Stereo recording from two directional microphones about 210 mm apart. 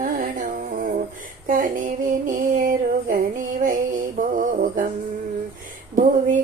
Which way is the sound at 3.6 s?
40° right (ahead or behind).